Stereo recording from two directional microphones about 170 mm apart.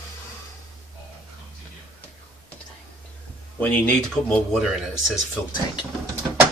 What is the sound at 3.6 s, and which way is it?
Speech, 5° left (ahead or behind).